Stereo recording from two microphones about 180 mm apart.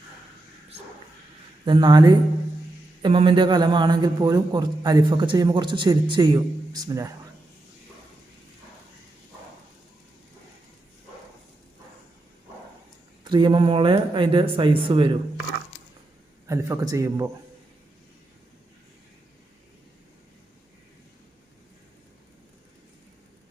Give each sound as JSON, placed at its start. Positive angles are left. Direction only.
{"t": 1.6, "sound": "a man's voice", "side_deg": -25}
{"t": 13.2, "sound": "a man's voice", "side_deg": -25}
{"t": 16.5, "sound": "a man's voice", "side_deg": -15}